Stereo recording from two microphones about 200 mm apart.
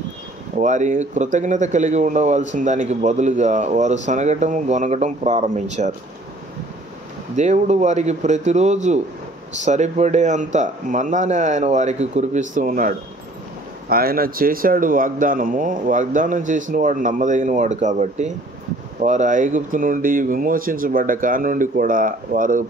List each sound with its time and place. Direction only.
0.6 s speech: 35° right (ahead or behind)
7.3 s speech: 35° right (ahead or behind)